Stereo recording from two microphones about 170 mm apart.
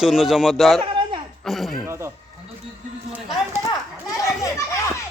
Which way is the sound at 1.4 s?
Centre (ahead or behind).